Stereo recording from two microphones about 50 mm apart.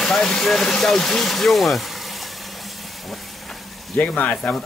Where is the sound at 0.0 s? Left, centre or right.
Centre.